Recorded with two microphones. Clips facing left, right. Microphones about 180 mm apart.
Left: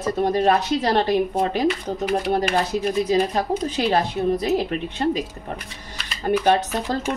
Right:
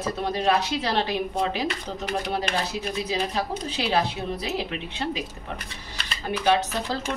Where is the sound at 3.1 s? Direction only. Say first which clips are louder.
Left 5 dB; 45° left (ahead or behind).